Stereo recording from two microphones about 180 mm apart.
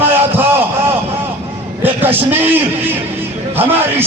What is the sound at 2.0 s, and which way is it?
Speech, 10° right (ahead or behind).